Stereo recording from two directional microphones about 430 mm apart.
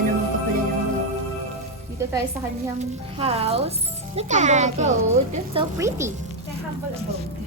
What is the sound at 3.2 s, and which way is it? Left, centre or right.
A woman's voice, centre.